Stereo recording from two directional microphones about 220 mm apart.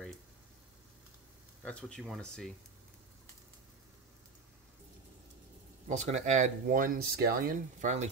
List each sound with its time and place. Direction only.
1.6 s speech: 5° left (ahead or behind)
5.9 s speech: 30° right (ahead or behind)